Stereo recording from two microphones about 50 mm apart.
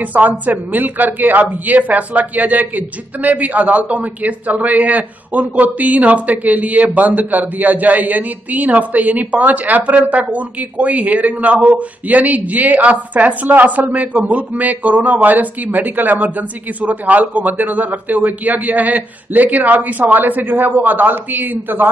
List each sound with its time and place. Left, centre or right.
0.0 s a man's voice: right